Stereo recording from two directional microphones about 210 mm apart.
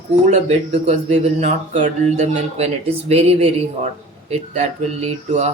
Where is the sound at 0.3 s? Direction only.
35° right (ahead or behind).